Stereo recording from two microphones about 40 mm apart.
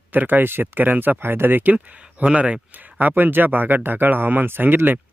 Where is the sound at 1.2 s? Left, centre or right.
Right.